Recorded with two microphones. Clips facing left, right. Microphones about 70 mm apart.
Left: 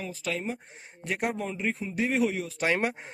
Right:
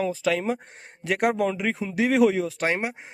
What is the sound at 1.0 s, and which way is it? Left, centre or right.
A man's voice, right.